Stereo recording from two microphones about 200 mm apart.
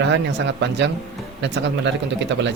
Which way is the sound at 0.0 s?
60° right (ahead or behind).